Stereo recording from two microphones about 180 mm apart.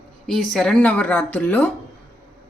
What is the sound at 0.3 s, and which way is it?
A woman's voice, centre (ahead or behind).